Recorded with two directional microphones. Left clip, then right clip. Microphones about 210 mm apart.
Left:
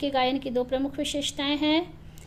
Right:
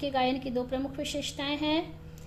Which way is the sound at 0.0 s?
35° left (ahead or behind).